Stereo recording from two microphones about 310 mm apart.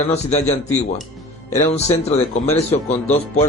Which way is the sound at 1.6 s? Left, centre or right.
Left.